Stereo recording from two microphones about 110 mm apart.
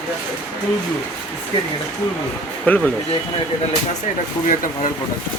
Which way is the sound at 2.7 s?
15° left (ahead or behind).